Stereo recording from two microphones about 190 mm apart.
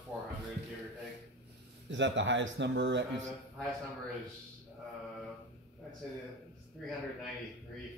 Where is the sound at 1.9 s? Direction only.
70° right (ahead or behind).